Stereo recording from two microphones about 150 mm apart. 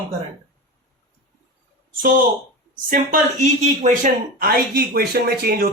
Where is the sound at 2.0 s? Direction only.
70° right (ahead or behind).